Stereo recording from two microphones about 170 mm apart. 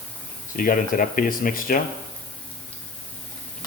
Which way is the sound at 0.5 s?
55° left (ahead or behind).